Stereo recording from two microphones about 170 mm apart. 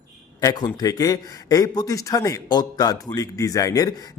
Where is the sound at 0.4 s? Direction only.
25° left (ahead or behind).